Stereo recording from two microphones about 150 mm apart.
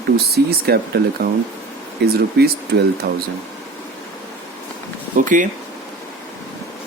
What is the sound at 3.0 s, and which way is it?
Speech, 70° right (ahead or behind).